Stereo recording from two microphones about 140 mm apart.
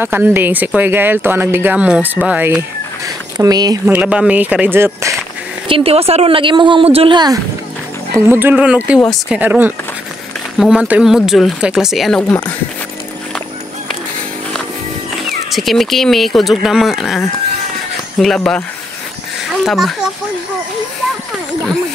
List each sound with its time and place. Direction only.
0.0 s speech: 15° right (ahead or behind)
3.3 s speech: 30° right (ahead or behind)
3.8 s speech: 10° right (ahead or behind)
5.7 s a woman's voice: 45° right (ahead or behind)
8.3 s speech: 15° right (ahead or behind); by 12.4 s 5° left (ahead or behind)
15.2 s speech: centre (ahead or behind)
18.2 s speech: 5° left (ahead or behind)